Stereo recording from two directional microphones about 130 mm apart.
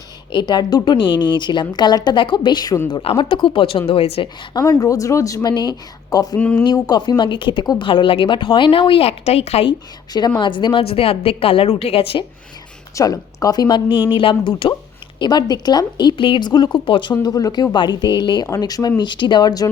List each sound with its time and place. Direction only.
0.3 s speech: 35° left (ahead or behind)
2.9 s a woman's voice: 45° left (ahead or behind)
4.5 s speech: 30° left (ahead or behind)
6.3 s speech: 10° left (ahead or behind)
6.7 s speech: 30° left (ahead or behind); by 9.6 s 55° left (ahead or behind)
9.6 s a woman's voice: 35° left (ahead or behind); by 12.2 s 50° left (ahead or behind)
13.0 s speech: 30° left (ahead or behind)